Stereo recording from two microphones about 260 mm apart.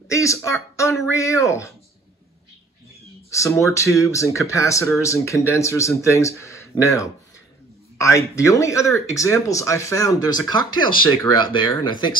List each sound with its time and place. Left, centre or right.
0.1 s speech: centre
3.3 s speech: centre